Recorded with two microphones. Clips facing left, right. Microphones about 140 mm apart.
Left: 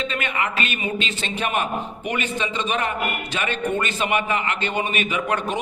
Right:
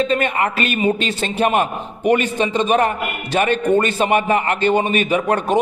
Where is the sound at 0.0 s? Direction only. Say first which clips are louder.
Right 8 dB; 40° right (ahead or behind).